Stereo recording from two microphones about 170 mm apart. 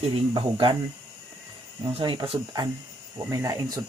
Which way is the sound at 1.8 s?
30° right (ahead or behind).